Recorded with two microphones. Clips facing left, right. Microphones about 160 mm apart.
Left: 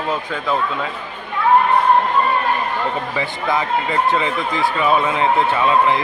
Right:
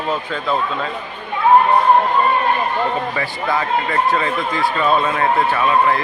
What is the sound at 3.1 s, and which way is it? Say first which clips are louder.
Speech: even; 15° left (ahead or behind).